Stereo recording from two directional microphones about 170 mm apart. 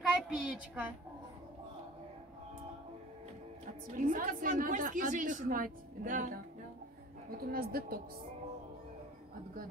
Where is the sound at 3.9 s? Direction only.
50° right (ahead or behind).